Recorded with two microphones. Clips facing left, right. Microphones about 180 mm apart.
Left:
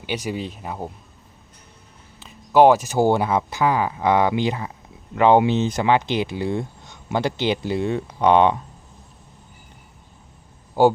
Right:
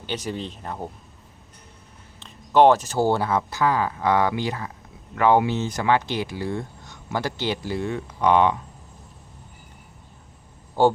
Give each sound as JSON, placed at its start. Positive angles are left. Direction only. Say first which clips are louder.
{"t": 0.0, "sound": "speech", "louder": "left 3 dB", "side_deg": 10}
{"t": 2.1, "sound": "speech", "louder": "left 2 dB", "side_deg": 5}
{"t": 10.8, "sound": "speech", "louder": "left 3 dB", "side_deg": 10}